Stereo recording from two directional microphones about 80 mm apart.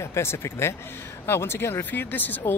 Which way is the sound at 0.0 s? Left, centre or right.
Left.